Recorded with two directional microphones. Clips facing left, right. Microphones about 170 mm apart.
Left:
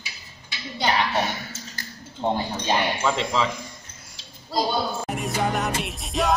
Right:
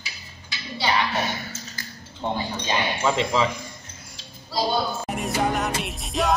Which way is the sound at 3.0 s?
5° right (ahead or behind).